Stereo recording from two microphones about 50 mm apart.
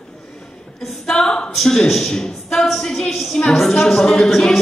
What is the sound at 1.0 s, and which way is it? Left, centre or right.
A woman's voice, centre.